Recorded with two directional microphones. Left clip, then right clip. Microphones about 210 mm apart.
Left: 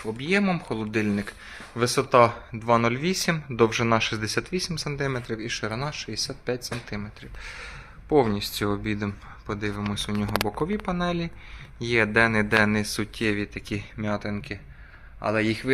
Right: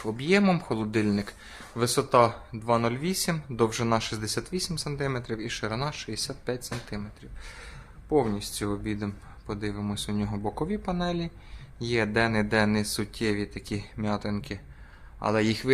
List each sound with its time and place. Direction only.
0.0 s speech: 15° right (ahead or behind)